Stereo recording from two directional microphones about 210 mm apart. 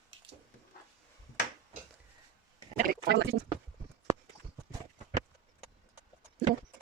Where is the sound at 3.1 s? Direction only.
50° right (ahead or behind).